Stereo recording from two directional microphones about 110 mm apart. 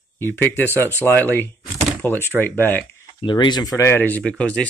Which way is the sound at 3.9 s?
15° left (ahead or behind).